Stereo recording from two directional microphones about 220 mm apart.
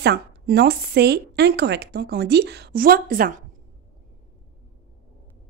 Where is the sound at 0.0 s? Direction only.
50° right (ahead or behind).